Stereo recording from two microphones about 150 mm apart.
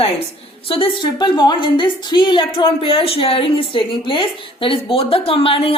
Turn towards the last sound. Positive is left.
turn(degrees=35)  # may be behind; listen again after turning